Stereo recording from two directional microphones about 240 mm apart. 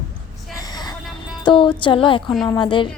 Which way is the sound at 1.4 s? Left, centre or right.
Left.